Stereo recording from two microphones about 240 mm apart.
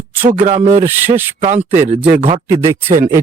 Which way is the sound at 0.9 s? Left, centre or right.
Centre.